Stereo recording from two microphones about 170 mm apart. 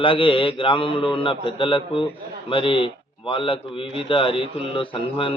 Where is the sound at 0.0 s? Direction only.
30° left (ahead or behind).